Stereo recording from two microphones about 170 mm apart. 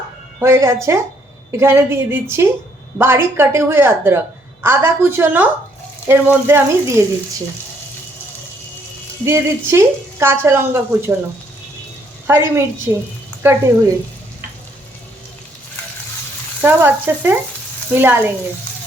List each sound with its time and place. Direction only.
0.3 s a woman's voice: 15° right (ahead or behind)
9.2 s a woman's voice: 15° right (ahead or behind)
12.3 s a woman's voice: 15° right (ahead or behind)
16.6 s a woman's voice: 10° right (ahead or behind)